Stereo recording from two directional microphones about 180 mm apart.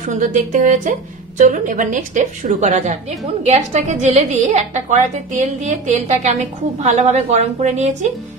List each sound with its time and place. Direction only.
0.2 s a woman's voice: 45° right (ahead or behind)